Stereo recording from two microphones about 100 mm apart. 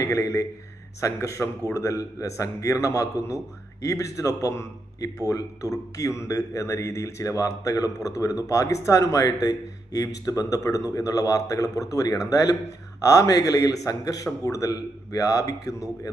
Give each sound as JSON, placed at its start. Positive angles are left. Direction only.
{"t": 0.0, "sound": "a man's voice", "side_deg": 30}